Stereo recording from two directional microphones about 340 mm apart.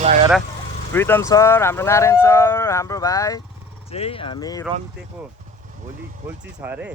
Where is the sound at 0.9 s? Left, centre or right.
Centre.